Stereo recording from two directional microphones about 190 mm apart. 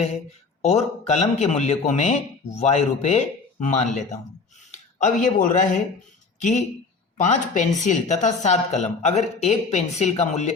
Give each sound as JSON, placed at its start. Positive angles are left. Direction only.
{"t": 0.6, "sound": "a man's voice", "side_deg": 35}